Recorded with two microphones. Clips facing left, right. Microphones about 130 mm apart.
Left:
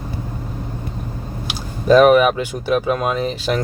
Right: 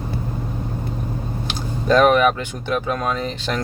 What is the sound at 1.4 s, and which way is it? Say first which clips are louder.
Speech: left 4 dB; 10° left (ahead or behind).